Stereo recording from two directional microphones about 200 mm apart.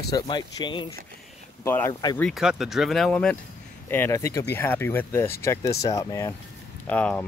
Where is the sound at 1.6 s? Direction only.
10° left (ahead or behind).